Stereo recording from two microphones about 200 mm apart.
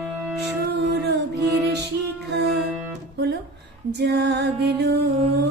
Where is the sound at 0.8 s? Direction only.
60° right (ahead or behind).